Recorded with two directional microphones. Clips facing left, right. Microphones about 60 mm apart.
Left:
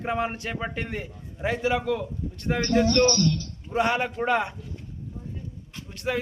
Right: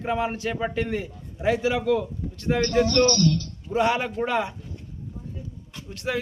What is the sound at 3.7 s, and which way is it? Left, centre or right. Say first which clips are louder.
Speech: right 2 dB; centre.